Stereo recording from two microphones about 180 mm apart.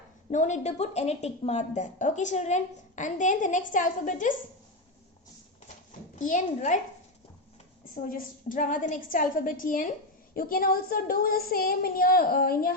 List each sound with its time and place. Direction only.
0.3 s a woman's voice: 40° left (ahead or behind)
6.1 s a woman's voice: 45° left (ahead or behind)
8.1 s a woman's voice: 45° left (ahead or behind)